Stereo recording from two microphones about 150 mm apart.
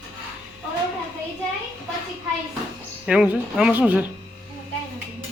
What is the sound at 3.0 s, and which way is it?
Speech, 10° right (ahead or behind).